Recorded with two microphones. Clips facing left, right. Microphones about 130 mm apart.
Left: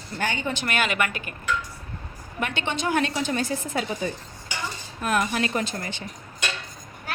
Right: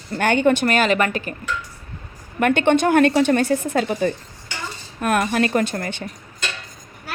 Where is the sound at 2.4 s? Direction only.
55° right (ahead or behind).